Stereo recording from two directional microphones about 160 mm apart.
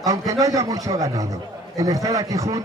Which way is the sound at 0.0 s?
20° right (ahead or behind).